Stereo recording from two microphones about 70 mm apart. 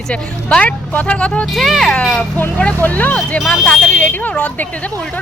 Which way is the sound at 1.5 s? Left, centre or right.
Centre.